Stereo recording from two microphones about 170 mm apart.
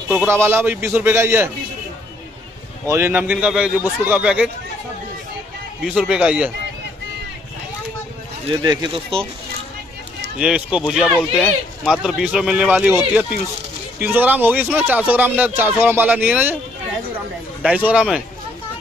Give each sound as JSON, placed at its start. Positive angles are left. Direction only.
{"t": 0.1, "sound": "speech", "side_deg": -10}
{"t": 2.9, "sound": "speech", "side_deg": -15}
{"t": 5.9, "sound": "speech", "side_deg": -5}
{"t": 8.5, "sound": "speech", "side_deg": -30}
{"t": 10.4, "sound": "speech", "side_deg": -5}
{"t": 17.6, "sound": "speech", "side_deg": -5}